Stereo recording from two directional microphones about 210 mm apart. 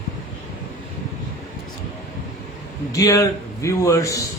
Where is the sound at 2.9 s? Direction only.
15° left (ahead or behind).